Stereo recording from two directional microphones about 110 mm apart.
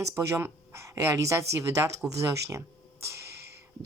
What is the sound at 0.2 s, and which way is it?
A woman's voice, 20° right (ahead or behind).